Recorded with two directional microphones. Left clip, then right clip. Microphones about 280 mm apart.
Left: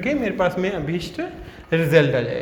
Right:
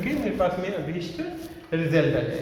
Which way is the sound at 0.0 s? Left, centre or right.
Left.